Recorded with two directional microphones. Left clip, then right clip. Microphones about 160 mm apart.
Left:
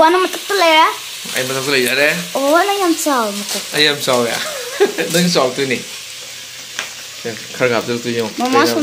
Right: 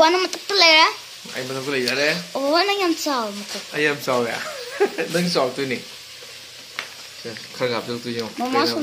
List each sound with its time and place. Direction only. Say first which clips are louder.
0.0 s a child's voice: left 5 dB; 10° right (ahead or behind)
7.5 s speech: left 8 dB; 20° left (ahead or behind)
8.4 s speech: left 7 dB; centre (ahead or behind)